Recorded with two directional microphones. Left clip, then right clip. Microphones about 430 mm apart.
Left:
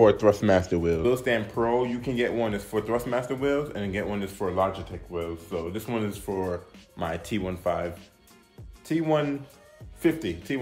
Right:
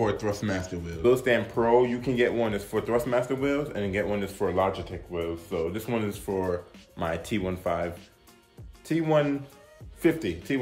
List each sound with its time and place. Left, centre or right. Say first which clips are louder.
0.0 s speech: left 9 dB; centre